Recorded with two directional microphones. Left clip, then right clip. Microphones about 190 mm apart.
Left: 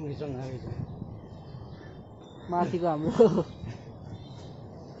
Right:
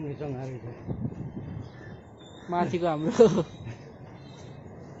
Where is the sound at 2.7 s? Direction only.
10° right (ahead or behind).